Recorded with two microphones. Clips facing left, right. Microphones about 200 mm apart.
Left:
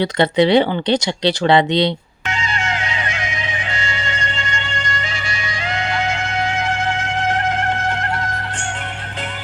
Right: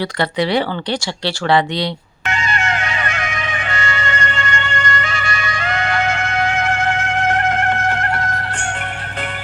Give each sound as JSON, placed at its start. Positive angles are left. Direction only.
{"t": 0.0, "sound": "speech", "side_deg": 20}
{"t": 2.2, "sound": "music", "side_deg": -60}